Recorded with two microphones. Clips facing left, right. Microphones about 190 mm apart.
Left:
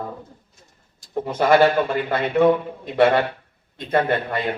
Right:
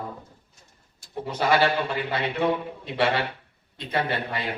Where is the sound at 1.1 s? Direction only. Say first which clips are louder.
Left 6 dB; 50° left (ahead or behind).